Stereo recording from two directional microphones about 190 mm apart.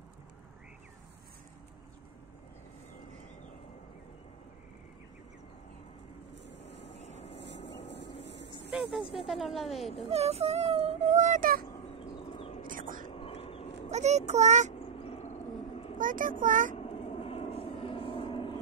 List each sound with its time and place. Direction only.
6.3 s vehicle: 65° left (ahead or behind)
7.0 s vehicle: 35° left (ahead or behind)
7.3 s vehicle: 65° left (ahead or behind)
9.3 s speech: centre (ahead or behind)
10.0 s speech: 35° right (ahead or behind)
11.6 s bird: 30° left (ahead or behind)
12.6 s whispering: 45° right (ahead or behind)
13.1 s a sound: 30° left (ahead or behind)
13.8 s a child's voice: 35° right (ahead or behind)
15.0 s a sound: 35° left (ahead or behind)
16.0 s a child's voice: 45° right (ahead or behind)
16.7 s vehicle: 30° left (ahead or behind)